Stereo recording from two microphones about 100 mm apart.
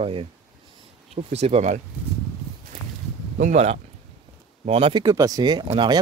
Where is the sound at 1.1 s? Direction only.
90° right.